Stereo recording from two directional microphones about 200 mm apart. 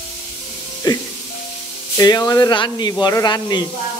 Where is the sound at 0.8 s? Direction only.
20° left (ahead or behind).